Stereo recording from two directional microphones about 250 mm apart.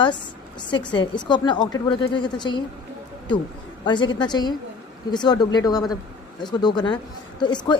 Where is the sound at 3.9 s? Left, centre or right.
Centre.